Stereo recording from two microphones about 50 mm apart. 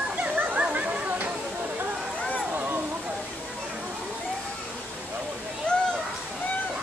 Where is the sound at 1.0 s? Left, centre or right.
Right.